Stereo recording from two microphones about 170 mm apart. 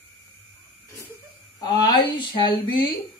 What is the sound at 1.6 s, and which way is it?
Speech, 25° left (ahead or behind).